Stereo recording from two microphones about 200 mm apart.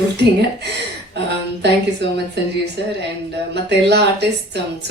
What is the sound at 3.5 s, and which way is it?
Speech, 55° right (ahead or behind).